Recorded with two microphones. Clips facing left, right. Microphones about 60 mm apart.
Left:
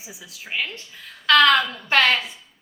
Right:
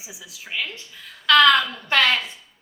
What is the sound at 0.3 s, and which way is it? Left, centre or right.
Speech, left.